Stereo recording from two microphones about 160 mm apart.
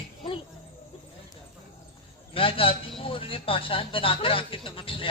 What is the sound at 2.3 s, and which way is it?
A man's voice, 35° left (ahead or behind).